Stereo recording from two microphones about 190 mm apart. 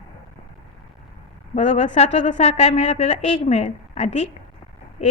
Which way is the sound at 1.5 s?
40° left (ahead or behind).